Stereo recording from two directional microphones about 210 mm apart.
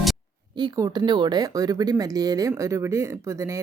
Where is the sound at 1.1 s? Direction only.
20° right (ahead or behind).